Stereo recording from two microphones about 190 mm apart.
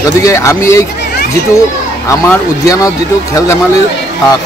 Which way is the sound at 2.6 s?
15° left (ahead or behind).